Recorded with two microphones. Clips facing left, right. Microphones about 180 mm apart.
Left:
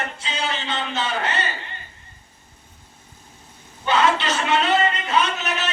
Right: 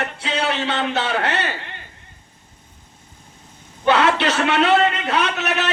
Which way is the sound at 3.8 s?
65° right (ahead or behind).